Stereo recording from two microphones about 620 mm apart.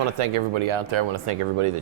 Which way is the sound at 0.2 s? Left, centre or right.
Right.